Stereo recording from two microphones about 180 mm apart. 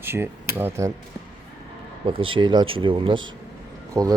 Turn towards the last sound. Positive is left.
turn(degrees=-15)  # may be behind; listen again after turning